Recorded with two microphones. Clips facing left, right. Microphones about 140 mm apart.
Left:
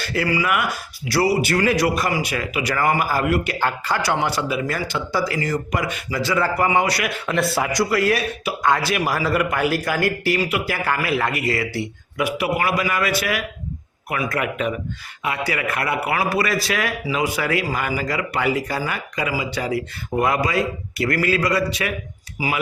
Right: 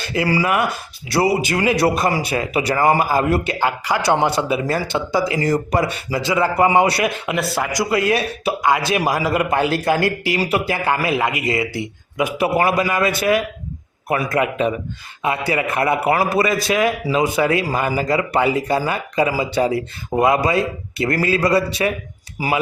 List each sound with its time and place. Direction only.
0.0 s speech: 20° right (ahead or behind)
0.3 s speech: 30° right (ahead or behind)
3.6 s speech: 15° right (ahead or behind)
5.4 s speech: 35° right (ahead or behind)
6.2 s speech: 20° right (ahead or behind)
7.3 s speech: centre (ahead or behind)
7.7 s speech: 15° right (ahead or behind); by 10.8 s 30° right (ahead or behind)
10.8 s speech: 20° right (ahead or behind); by 22.6 s 35° right (ahead or behind)